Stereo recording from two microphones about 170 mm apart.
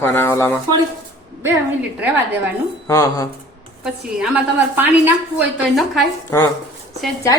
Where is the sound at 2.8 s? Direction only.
20° left (ahead or behind).